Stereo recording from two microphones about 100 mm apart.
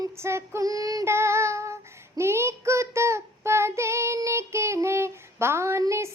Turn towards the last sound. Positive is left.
turn(degrees=-30)  # may be behind; listen again after turning